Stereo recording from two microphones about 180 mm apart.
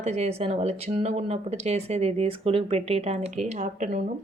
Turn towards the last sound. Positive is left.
turn(degrees=-40)  # may be behind; listen again after turning